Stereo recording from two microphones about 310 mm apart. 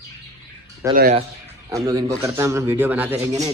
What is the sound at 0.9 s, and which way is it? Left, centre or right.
Speech, right.